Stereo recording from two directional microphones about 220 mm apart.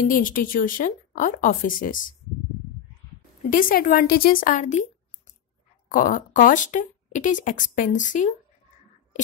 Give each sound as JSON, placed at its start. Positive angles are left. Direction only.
{"t": 0.0, "sound": "speech", "side_deg": 35}
{"t": 3.4, "sound": "speech", "side_deg": 40}